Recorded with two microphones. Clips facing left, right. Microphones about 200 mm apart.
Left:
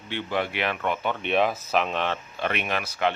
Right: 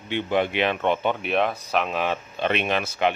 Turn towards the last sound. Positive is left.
turn(degrees=-25)  # may be behind; listen again after turning